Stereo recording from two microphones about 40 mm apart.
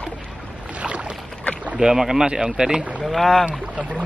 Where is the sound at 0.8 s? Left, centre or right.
Right.